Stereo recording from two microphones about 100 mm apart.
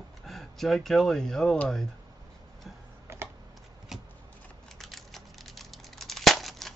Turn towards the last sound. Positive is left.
turn(degrees=0)  # may be behind; listen again after turning